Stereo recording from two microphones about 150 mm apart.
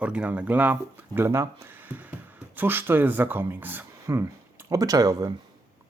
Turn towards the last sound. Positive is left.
turn(degrees=-25)  # may be behind; listen again after turning